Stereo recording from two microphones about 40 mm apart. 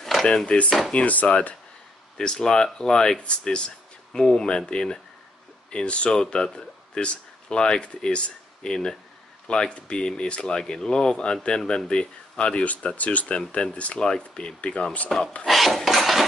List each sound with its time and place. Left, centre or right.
0.0 s a sound: centre
0.5 s speech: left
2.1 s speech: centre
6.1 s speech: centre
12.6 s speech: left
15.4 s dishes: centre